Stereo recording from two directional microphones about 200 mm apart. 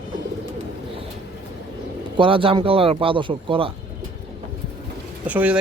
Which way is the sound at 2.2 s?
25° right (ahead or behind).